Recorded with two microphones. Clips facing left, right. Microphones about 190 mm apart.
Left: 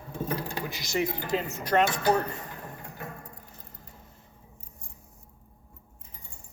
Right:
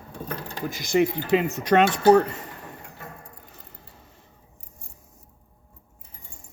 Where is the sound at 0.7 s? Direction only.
55° right (ahead or behind); by 1.8 s 75° right (ahead or behind).